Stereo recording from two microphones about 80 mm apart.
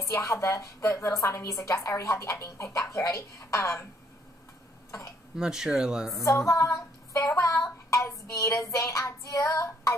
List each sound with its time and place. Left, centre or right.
0.0 s a woman's voice: left
5.4 s speech: centre
6.2 s a woman's voice: left